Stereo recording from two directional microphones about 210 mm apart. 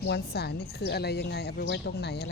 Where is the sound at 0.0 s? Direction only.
50° left (ahead or behind).